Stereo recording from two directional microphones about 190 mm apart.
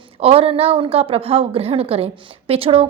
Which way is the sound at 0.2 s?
30° right (ahead or behind).